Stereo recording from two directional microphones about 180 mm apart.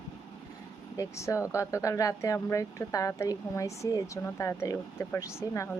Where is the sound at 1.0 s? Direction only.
15° left (ahead or behind).